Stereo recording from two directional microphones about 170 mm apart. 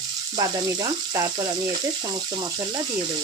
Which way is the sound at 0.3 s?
25° right (ahead or behind).